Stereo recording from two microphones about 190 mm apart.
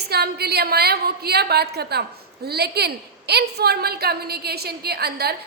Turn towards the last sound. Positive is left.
turn(degrees=-55)  # may be behind; listen again after turning